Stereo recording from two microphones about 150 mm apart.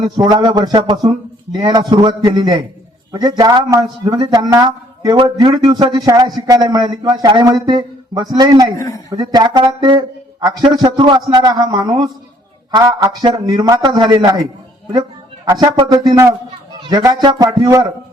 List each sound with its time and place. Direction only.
0.0 s speech: 25° right (ahead or behind)
15.4 s speech: 25° right (ahead or behind)